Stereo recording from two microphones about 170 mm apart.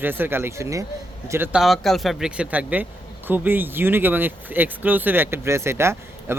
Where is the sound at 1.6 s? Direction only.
Centre (ahead or behind).